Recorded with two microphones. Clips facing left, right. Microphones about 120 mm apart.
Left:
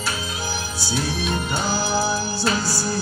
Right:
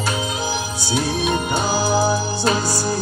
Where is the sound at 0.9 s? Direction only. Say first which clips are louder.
Right 4 dB; 20° right (ahead or behind).